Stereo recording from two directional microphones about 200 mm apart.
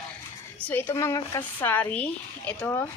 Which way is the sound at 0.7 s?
10° left (ahead or behind).